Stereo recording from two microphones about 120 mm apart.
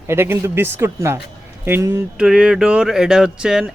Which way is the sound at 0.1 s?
20° right (ahead or behind).